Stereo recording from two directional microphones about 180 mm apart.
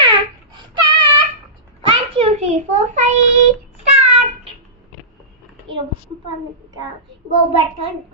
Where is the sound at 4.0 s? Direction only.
35° right (ahead or behind).